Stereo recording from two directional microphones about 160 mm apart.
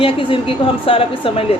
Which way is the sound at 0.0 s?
35° left (ahead or behind).